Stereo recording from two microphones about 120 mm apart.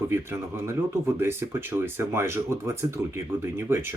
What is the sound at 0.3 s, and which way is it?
Speech, 20° right (ahead or behind).